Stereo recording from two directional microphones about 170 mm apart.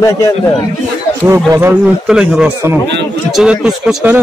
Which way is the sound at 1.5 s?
15° right (ahead or behind).